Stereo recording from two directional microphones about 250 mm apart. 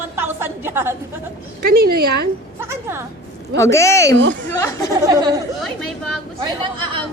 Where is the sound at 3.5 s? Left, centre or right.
Centre.